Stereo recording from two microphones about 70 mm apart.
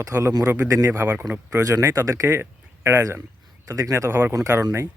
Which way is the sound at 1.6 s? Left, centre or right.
Right.